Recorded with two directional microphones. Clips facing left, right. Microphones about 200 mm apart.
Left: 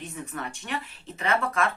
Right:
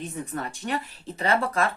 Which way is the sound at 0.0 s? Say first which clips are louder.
Right 3 dB; 35° right (ahead or behind).